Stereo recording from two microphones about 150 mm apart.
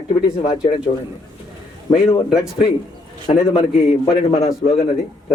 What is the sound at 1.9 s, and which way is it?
Speech, 40° left (ahead or behind).